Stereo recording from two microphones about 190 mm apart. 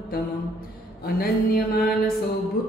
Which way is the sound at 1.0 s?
55° left (ahead or behind).